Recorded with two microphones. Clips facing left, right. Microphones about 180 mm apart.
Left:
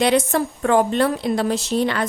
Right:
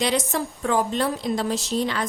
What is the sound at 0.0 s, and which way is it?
A woman's voice, 60° left (ahead or behind).